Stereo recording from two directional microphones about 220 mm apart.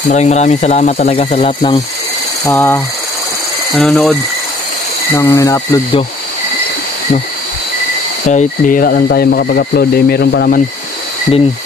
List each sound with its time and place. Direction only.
0.1 s speech: 30° left (ahead or behind)
2.4 s speech: 10° left (ahead or behind)
5.1 s speech: 15° left (ahead or behind)
8.3 s speech: 35° left (ahead or behind)